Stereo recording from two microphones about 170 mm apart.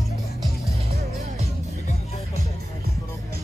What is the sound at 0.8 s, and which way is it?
Music, 40° right (ahead or behind).